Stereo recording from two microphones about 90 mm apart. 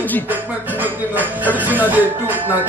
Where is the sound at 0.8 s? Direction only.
20° right (ahead or behind).